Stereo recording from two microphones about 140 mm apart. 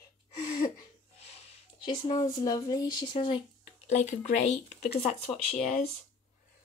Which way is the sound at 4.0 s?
55° left (ahead or behind).